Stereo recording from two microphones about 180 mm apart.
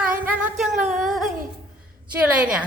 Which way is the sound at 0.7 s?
40° right (ahead or behind).